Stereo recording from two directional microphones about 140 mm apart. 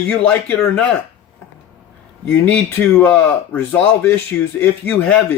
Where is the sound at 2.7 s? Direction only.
15° left (ahead or behind).